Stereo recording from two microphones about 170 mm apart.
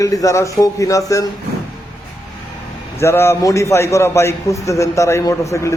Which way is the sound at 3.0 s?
15° left (ahead or behind).